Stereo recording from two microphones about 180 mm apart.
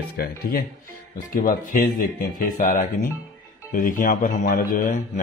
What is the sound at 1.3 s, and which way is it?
Mantra, 50° left (ahead or behind).